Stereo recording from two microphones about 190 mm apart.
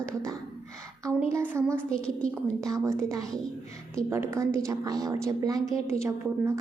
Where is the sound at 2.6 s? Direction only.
15° right (ahead or behind).